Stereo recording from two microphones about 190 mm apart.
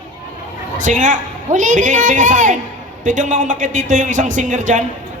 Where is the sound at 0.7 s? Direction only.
45° right (ahead or behind).